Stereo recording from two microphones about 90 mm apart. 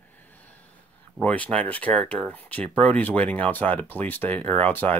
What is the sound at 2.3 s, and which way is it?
Speech, 15° left (ahead or behind).